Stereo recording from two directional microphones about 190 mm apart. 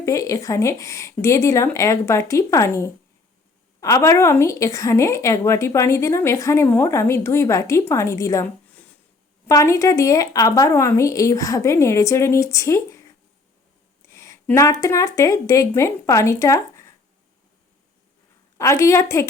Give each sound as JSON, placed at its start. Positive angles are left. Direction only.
{"t": 0.0, "sound": "a woman's voice", "side_deg": 15}
{"t": 14.1, "sound": "speech", "side_deg": 15}
{"t": 18.5, "sound": "a woman's voice", "side_deg": 15}